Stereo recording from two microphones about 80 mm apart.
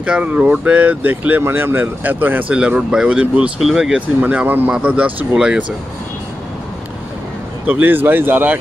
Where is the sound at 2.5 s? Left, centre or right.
Centre.